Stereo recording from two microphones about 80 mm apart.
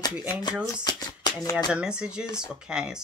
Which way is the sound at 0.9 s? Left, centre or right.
Left.